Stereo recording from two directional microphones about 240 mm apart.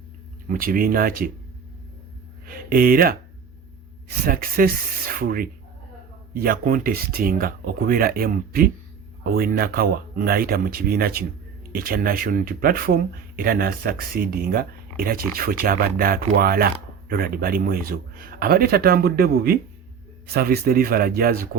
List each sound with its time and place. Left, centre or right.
0.4 s speech: right
2.5 s speech: right